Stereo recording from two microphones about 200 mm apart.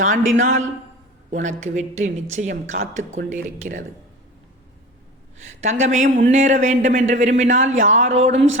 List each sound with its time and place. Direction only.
0.0 s speech: 40° right (ahead or behind)
5.8 s speech: 35° right (ahead or behind)